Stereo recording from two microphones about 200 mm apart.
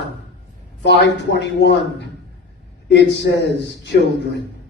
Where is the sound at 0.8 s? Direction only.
60° left (ahead or behind).